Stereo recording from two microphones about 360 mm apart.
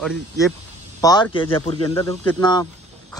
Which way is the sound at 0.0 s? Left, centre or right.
Centre.